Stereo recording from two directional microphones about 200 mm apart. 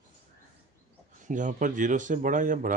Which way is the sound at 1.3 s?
40° right (ahead or behind).